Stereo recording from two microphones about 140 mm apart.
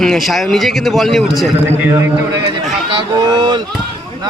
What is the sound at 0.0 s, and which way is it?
A man's voice, centre (ahead or behind).